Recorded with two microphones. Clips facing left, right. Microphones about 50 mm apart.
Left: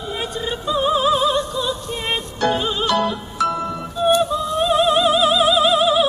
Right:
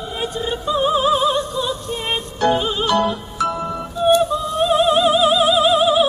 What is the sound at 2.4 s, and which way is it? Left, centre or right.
Music, centre.